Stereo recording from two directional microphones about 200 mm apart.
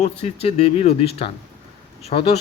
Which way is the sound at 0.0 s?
30° left (ahead or behind).